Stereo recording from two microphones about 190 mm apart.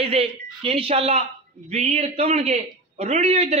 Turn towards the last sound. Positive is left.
turn(degrees=-35)  # may be behind; listen again after turning